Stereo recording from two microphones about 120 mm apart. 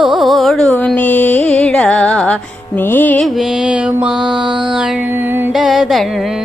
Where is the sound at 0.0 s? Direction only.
Centre (ahead or behind).